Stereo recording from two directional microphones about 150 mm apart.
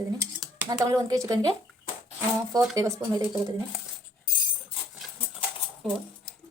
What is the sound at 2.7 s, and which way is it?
Speech, 25° right (ahead or behind).